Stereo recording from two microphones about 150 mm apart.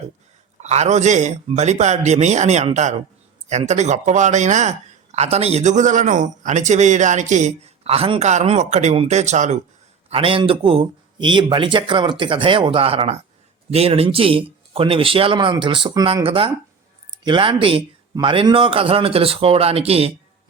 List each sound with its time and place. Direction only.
0.6 s speech: 50° right (ahead or behind)
10.1 s speech: 35° right (ahead or behind)